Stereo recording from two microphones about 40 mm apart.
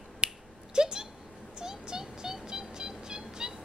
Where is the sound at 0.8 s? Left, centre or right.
Centre.